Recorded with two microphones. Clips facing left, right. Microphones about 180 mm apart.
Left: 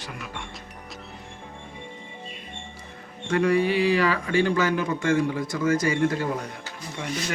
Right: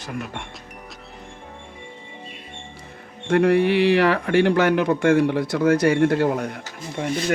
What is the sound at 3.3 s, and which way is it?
Speech, 60° right (ahead or behind).